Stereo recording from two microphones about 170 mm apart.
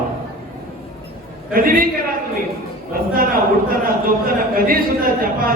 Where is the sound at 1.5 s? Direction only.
55° right (ahead or behind).